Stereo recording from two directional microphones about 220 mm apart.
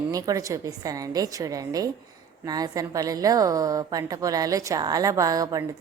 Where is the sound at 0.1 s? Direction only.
15° right (ahead or behind).